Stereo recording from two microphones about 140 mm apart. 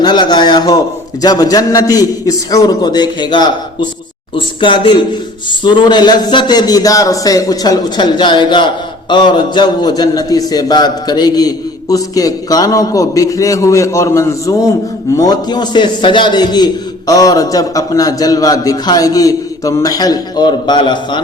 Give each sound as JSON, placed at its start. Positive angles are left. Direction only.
{"t": 0.0, "sound": "a man's voice", "side_deg": 30}